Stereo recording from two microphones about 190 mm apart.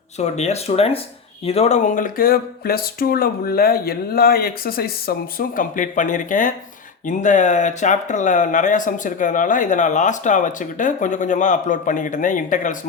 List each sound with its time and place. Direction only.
0.2 s speech: 35° left (ahead or behind)